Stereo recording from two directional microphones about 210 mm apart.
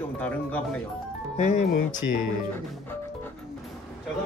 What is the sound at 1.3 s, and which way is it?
Speech, 35° left (ahead or behind).